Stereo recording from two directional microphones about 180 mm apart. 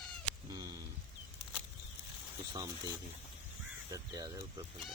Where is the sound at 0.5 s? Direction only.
20° right (ahead or behind).